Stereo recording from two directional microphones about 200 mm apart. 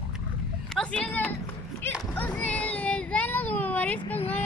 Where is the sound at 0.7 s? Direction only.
5° left (ahead or behind).